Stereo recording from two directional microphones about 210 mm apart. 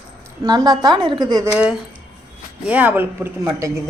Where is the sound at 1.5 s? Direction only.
5° right (ahead or behind).